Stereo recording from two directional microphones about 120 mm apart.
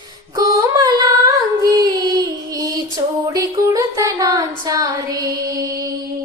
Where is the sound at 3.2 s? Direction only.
30° right (ahead or behind).